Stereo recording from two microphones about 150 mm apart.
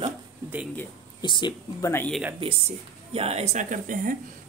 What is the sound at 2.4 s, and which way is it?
Speech, 40° right (ahead or behind).